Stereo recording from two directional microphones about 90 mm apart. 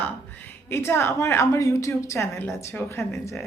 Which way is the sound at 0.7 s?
30° left (ahead or behind).